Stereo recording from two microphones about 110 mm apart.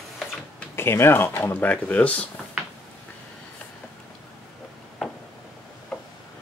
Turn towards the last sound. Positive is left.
turn(degrees=0)  # may be behind; listen again after turning